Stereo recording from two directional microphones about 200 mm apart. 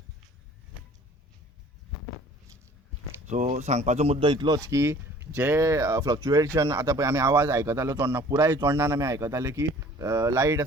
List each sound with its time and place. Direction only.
3.2 s speech: 35° right (ahead or behind); by 10.6 s 15° right (ahead or behind)